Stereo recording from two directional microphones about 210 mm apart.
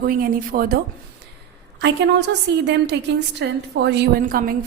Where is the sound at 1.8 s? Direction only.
55° right (ahead or behind).